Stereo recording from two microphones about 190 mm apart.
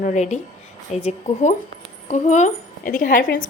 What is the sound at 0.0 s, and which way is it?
A woman's voice, 40° left (ahead or behind).